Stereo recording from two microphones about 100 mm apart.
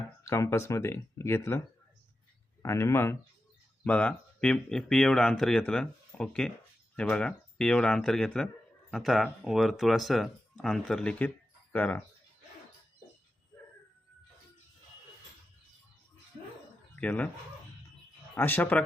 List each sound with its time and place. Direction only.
0.3 s speech: 30° left (ahead or behind)
3.8 s speech: 15° left (ahead or behind)
16.9 s speech: 15° left (ahead or behind)
18.3 s speech: 20° left (ahead or behind)